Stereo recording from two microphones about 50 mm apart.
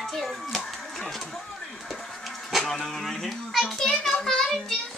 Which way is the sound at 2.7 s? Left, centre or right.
Centre.